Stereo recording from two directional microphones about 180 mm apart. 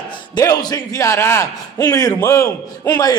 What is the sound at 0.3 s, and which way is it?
A man's voice, 20° left (ahead or behind).